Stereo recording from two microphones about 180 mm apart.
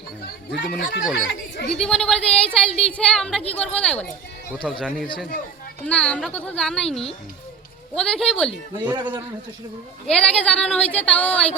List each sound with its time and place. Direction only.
0.3 s speech: 65° left (ahead or behind)
1.7 s speech: 5° left (ahead or behind)
8.8 s a man's voice: 25° right (ahead or behind)
10.1 s speech: 5° left (ahead or behind)